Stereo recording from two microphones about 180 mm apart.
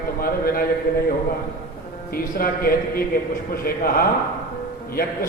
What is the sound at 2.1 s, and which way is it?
A man's voice, 55° left (ahead or behind).